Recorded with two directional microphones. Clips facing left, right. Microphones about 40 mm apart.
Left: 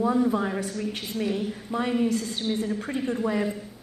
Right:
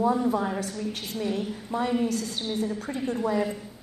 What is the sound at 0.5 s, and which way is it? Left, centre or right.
A woman's voice, left.